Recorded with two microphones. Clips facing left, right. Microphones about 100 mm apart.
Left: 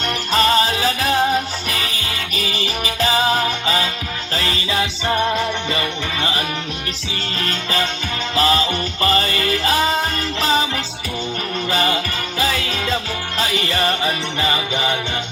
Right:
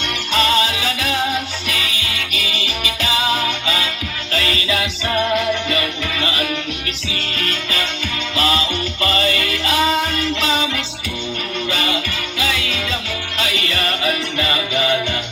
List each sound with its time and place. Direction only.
0.3 s music: 40° left (ahead or behind)